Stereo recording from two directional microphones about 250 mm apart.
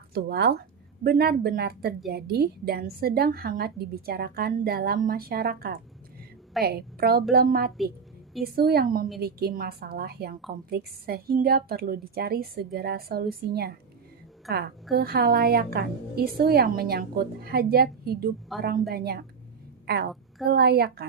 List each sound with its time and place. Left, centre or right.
0.1 s a woman's voice: right
14.9 s a woman's voice: right